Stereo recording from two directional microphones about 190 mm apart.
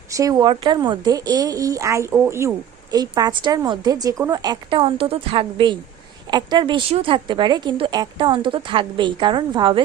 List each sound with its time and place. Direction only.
0.1 s a woman's voice: 20° right (ahead or behind)